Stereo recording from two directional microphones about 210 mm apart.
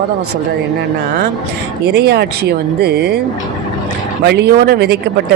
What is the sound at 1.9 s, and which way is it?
Speech, 50° right (ahead or behind).